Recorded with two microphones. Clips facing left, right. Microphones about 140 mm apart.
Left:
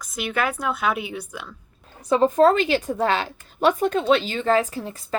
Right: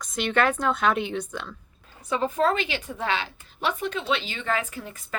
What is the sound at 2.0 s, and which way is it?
A woman's voice, 35° left (ahead or behind).